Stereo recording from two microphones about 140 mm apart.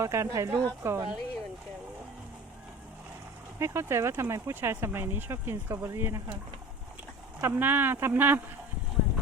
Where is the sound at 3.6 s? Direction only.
20° right (ahead or behind).